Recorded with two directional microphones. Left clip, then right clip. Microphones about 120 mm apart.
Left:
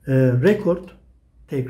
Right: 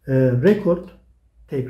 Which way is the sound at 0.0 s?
35° left (ahead or behind).